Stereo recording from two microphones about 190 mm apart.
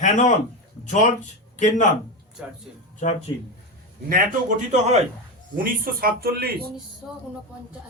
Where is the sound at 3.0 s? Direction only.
40° left (ahead or behind).